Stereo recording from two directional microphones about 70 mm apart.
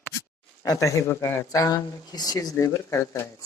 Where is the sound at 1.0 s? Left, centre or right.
Left.